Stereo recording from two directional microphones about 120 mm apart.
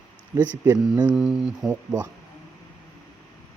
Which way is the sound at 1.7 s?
15° right (ahead or behind).